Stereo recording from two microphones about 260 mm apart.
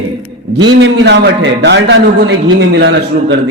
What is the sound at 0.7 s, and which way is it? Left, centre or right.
A man's voice, right.